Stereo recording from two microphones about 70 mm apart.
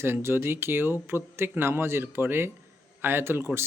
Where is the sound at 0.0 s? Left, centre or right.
Right.